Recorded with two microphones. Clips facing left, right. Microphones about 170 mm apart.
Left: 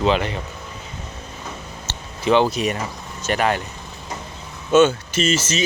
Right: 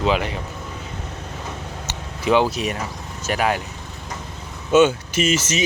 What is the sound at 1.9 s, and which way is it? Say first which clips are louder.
Speech: left 1 dB; 10° right (ahead or behind).